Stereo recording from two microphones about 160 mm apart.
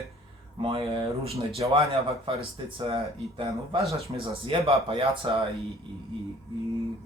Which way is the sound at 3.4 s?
20° right (ahead or behind).